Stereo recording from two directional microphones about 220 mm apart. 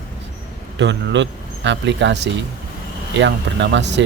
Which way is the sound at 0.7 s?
55° right (ahead or behind).